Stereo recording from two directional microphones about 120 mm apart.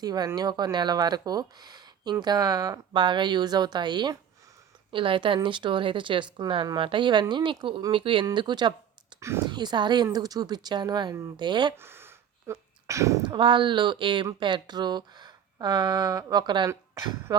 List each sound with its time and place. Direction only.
0.0 s speech: 35° right (ahead or behind)
11.8 s a sound: 20° right (ahead or behind)
13.2 s speech: 40° right (ahead or behind)